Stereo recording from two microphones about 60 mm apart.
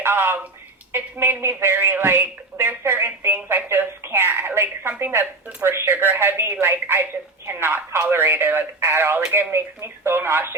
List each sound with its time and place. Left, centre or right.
0.0 s a man's voice: right